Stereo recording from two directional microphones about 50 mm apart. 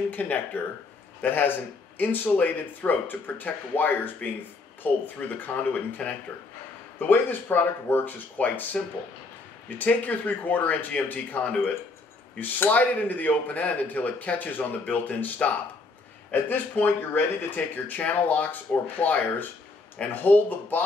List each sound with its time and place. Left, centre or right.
0.1 s speech: left